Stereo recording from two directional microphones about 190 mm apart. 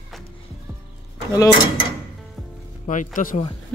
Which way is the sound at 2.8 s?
40° left (ahead or behind).